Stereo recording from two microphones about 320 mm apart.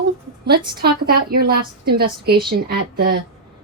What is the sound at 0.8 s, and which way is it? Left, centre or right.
A woman's voice, right.